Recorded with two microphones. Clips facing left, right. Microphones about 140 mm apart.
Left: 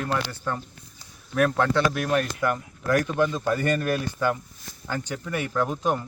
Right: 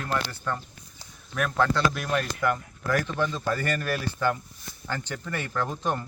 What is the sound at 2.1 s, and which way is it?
Speech, 15° left (ahead or behind).